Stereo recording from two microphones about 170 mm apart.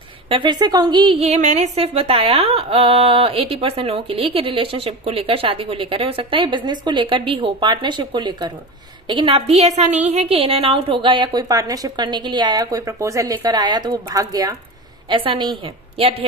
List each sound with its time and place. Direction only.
0.3 s a woman's voice: 25° right (ahead or behind)